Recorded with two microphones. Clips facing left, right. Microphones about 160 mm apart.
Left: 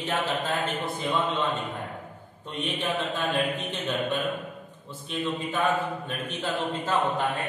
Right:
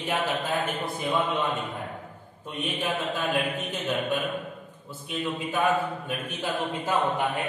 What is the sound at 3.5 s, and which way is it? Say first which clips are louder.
Speech: right 1 dB; 10° right (ahead or behind).